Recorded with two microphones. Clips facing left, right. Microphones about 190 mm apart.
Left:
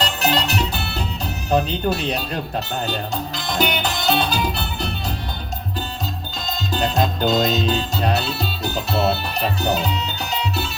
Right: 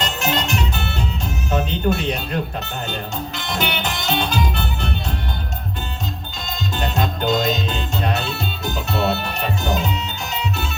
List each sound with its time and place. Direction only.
0.0 s music: 35° left (ahead or behind)
1.5 s speech: 35° left (ahead or behind)
3.3 s music: 35° left (ahead or behind)
6.7 s music: 35° left (ahead or behind)
8.7 s speech: 35° left (ahead or behind)